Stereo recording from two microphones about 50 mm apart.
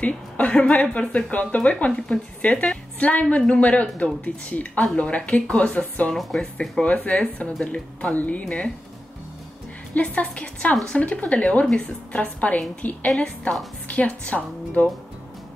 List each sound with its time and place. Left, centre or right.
0.0 s a woman's voice: left
1.9 s a woman's voice: centre
9.9 s a woman's voice: left